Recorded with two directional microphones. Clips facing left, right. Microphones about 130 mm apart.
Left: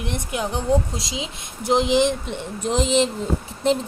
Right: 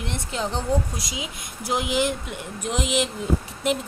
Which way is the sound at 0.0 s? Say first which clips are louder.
Left 2 dB; 15° left (ahead or behind).